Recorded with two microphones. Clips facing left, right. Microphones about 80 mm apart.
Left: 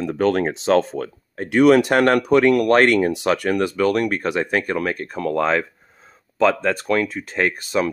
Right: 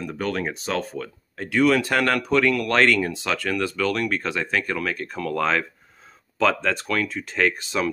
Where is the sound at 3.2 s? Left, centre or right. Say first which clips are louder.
Left 6 dB; centre.